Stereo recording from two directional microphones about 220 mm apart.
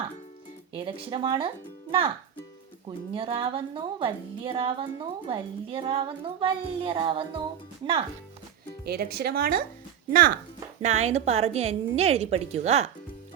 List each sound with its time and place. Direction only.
0.9 s a woman's voice: 25° right (ahead or behind)
8.8 s a woman's voice: 45° right (ahead or behind); by 12.9 s 30° right (ahead or behind)